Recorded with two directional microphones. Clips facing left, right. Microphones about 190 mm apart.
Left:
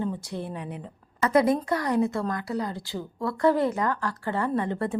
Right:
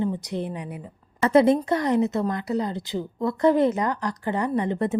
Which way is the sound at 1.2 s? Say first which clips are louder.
Right 4 dB; 25° right (ahead or behind).